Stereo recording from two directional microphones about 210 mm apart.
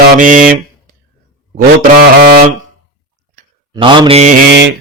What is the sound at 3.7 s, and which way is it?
Speech, 20° right (ahead or behind).